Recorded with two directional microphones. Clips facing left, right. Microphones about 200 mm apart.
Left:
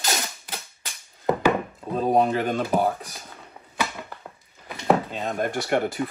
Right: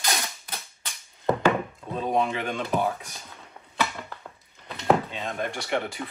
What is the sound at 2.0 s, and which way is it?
Speech, 40° left (ahead or behind).